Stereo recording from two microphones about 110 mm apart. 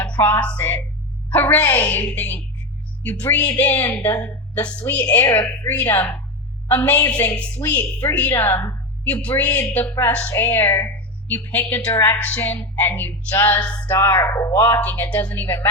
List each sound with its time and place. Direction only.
0.0 s a woman's voice: 20° left (ahead or behind)
4.7 s a woman's voice: 15° left (ahead or behind)
14.0 s speech: 25° left (ahead or behind)